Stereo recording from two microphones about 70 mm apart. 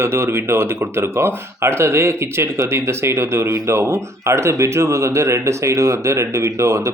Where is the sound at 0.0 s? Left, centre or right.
Right.